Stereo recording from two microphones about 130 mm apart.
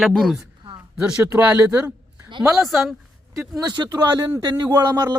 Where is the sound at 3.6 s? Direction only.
30° right (ahead or behind).